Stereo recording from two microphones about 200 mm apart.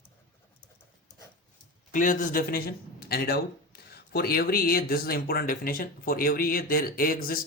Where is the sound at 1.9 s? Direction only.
40° left (ahead or behind).